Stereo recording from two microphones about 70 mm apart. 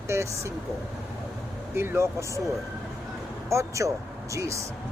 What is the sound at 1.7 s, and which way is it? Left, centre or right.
Speech, right.